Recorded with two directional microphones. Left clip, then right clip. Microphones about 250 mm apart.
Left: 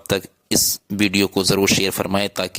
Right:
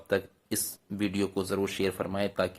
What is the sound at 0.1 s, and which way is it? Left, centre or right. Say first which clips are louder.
Speech: left 9 dB; left.